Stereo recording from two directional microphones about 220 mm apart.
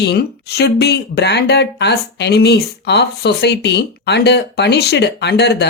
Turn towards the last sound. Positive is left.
turn(degrees=50)  # may be behind; listen again after turning